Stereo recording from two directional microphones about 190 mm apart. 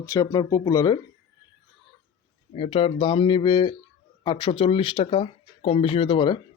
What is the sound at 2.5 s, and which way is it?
A man's voice, 30° left (ahead or behind).